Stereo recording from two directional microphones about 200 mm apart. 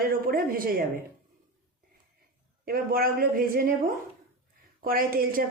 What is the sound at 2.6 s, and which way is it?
Speech, 45° right (ahead or behind).